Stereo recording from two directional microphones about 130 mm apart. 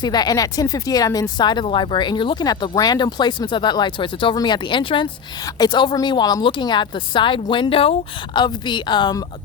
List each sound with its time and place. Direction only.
0.0 s speech: 30° left (ahead or behind)